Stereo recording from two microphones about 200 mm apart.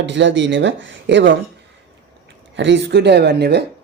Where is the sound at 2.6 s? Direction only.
60° right (ahead or behind).